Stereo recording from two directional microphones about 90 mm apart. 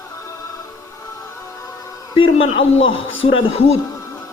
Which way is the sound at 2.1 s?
75° left (ahead or behind).